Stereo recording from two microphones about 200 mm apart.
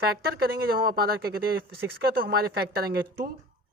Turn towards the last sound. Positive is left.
turn(degrees=-50)  # may be behind; listen again after turning